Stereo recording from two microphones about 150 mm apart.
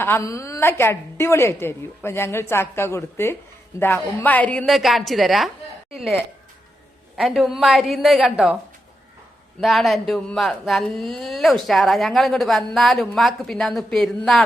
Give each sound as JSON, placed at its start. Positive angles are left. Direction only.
{"t": 0.0, "sound": "a woman's voice", "side_deg": 15}
{"t": 7.2, "sound": "speech", "side_deg": 0}
{"t": 9.6, "sound": "speech", "side_deg": 0}